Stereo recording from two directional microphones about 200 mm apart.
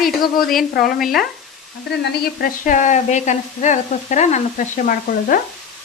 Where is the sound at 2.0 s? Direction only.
45° left (ahead or behind).